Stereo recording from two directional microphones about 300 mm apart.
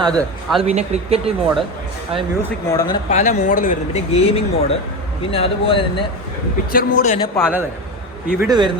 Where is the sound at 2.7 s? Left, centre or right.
Centre.